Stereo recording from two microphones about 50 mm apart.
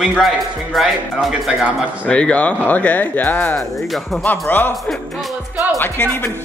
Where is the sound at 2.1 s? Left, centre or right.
Left.